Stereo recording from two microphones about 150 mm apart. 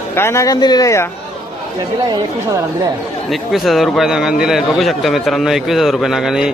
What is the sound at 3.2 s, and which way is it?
A man's voice, centre (ahead or behind).